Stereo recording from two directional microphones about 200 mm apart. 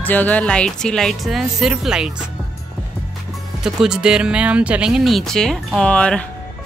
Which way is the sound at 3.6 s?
5° right (ahead or behind).